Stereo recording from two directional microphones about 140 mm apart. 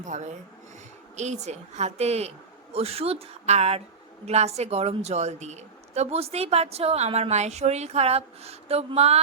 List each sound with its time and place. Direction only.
0.0 s a woman's voice: 60° right (ahead or behind)